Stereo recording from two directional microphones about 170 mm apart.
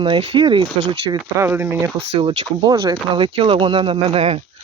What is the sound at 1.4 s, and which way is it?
Speech, 15° right (ahead or behind).